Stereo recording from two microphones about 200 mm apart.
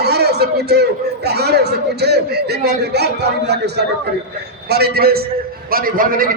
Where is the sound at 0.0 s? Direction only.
55° right (ahead or behind).